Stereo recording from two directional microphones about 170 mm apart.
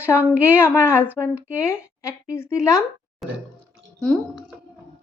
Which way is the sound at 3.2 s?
Centre (ahead or behind).